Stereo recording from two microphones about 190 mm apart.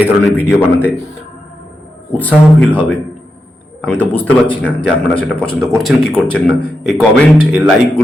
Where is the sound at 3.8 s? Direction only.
10° left (ahead or behind).